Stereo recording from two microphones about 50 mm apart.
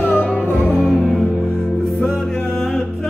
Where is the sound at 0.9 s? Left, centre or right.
Centre.